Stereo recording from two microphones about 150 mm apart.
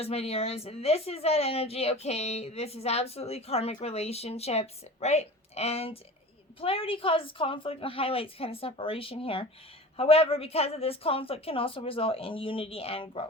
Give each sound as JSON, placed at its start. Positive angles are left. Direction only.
{"t": 0.0, "sound": "a woman's voice", "side_deg": 40}